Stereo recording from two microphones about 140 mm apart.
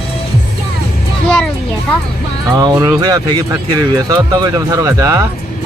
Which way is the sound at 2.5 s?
30° right (ahead or behind).